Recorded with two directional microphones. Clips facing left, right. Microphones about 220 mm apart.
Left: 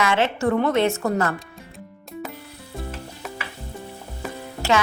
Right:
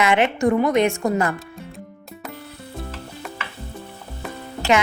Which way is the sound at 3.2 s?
Centre (ahead or behind).